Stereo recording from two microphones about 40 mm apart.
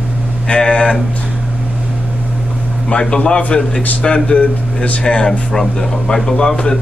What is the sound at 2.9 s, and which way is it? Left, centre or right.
A man's voice, left.